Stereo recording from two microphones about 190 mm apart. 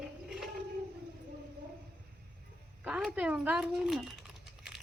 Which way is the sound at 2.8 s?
5° right (ahead or behind).